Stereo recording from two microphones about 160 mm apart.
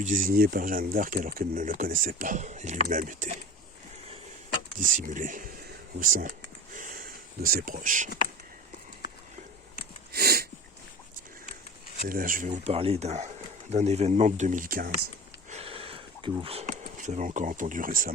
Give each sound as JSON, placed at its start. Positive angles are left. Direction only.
{"t": 0.0, "sound": "speech", "side_deg": -55}
{"t": 4.8, "sound": "speech", "side_deg": -55}
{"t": 6.7, "sound": "a sound", "side_deg": -60}
{"t": 10.1, "sound": "sneeze", "side_deg": -80}
{"t": 12.0, "sound": "speech", "side_deg": -60}
{"t": 12.7, "sound": "speech", "side_deg": -40}
{"t": 15.4, "sound": "a sound", "side_deg": -40}
{"t": 16.4, "sound": "speech", "side_deg": -40}